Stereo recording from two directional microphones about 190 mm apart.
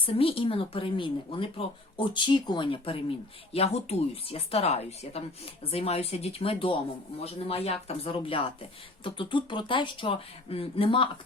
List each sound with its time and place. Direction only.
0.0 s speech: 30° left (ahead or behind)